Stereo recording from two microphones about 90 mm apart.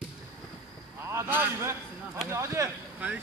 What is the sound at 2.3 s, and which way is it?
Speech, 30° right (ahead or behind).